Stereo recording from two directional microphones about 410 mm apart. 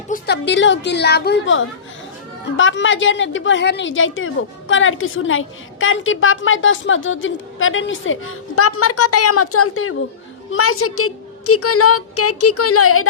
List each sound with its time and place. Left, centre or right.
0.1 s a woman's voice: left